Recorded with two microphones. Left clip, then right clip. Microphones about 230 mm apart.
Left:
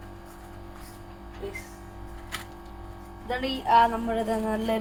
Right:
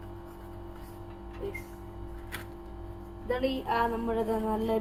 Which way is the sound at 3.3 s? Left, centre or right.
Left.